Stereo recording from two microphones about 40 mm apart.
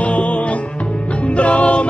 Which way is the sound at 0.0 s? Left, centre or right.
Left.